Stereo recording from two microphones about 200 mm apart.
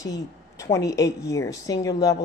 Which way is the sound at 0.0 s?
15° left (ahead or behind).